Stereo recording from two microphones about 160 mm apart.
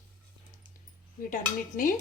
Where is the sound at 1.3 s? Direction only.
55° left (ahead or behind).